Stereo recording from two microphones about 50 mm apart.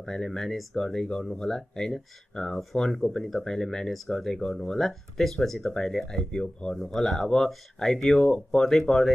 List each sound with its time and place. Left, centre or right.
0.0 s speech: centre
6.8 s speech: centre
8.5 s speech: centre